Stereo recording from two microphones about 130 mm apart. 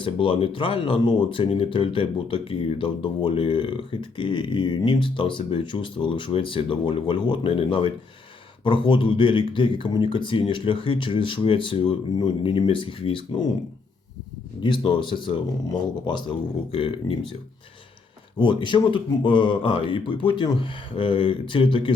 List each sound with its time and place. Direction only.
0.0 s speech: 40° left (ahead or behind)
14.6 s speech: 40° left (ahead or behind)
16.7 s speech: 45° left (ahead or behind)
18.3 s speech: 40° left (ahead or behind)